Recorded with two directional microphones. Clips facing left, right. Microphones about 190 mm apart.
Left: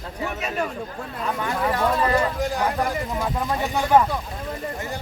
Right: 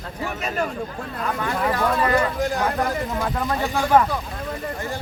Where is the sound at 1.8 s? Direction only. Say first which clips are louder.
Even; 20° left (ahead or behind).